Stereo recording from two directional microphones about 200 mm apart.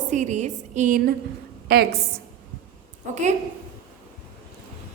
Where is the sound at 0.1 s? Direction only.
35° right (ahead or behind); by 1.9 s 50° right (ahead or behind).